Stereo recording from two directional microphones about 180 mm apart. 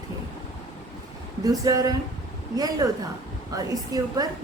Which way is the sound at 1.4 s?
20° right (ahead or behind).